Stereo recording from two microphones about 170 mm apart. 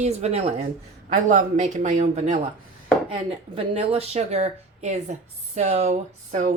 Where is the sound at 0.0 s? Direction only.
40° right (ahead or behind).